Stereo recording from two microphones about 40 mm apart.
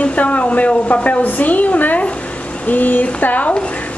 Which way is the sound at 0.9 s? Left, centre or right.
Left.